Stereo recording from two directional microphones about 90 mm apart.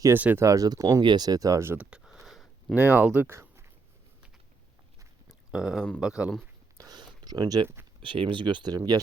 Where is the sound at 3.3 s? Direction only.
30° right (ahead or behind).